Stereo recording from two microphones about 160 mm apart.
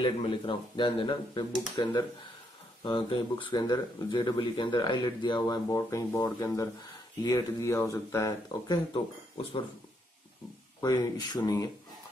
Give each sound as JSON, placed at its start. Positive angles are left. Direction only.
{"t": 0.0, "sound": "speech", "side_deg": 30}
{"t": 10.8, "sound": "speech", "side_deg": 25}